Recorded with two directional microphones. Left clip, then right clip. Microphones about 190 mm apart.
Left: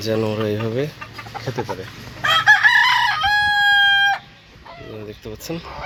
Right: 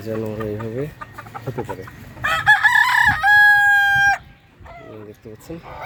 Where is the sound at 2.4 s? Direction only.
30° left (ahead or behind).